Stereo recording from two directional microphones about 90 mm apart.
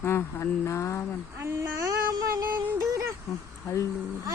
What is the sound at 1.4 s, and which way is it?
A child's voice, 30° right (ahead or behind).